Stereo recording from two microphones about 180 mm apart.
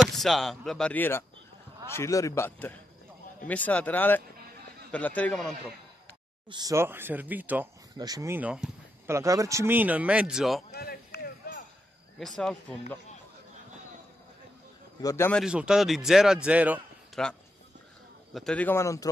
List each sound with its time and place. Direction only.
0.0 s a man's voice: centre (ahead or behind)
6.5 s speech: 20° right (ahead or behind)
9.1 s speech: 20° right (ahead or behind); by 10.6 s centre (ahead or behind)
10.7 s a sound: 60° left (ahead or behind)
12.4 s a man's voice: 5° left (ahead or behind)
15.0 s a man's voice: 15° left (ahead or behind)
15.4 s a man's voice: 5° right (ahead or behind)
18.3 s a man's voice: 5° left (ahead or behind)